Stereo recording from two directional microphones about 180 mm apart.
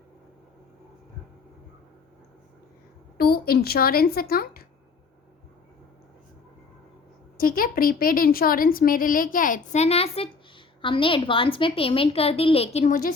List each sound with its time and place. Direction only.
3.2 s speech: 60° left (ahead or behind)
7.3 s a woman's voice: 50° left (ahead or behind)